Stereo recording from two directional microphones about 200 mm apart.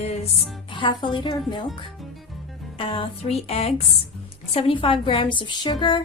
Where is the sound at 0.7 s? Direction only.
25° left (ahead or behind).